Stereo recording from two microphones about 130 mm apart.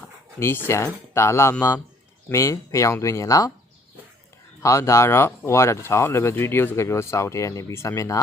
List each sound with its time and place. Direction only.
0.3 s speech: 20° left (ahead or behind)
4.6 s speech: 20° left (ahead or behind)